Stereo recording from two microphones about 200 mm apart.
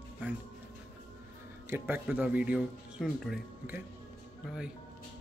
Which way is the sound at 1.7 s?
10° right (ahead or behind).